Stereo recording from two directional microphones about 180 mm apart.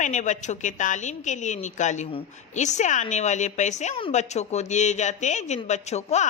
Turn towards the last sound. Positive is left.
turn(degrees=40)  # may be behind; listen again after turning